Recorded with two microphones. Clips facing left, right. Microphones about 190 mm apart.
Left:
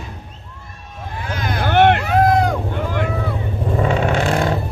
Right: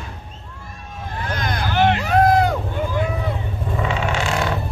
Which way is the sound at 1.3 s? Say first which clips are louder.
Left 2 dB; 5° left (ahead or behind).